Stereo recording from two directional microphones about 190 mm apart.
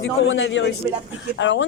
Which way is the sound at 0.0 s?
85° left.